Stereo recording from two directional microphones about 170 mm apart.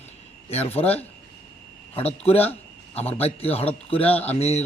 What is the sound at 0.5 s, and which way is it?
Speech, 35° left (ahead or behind).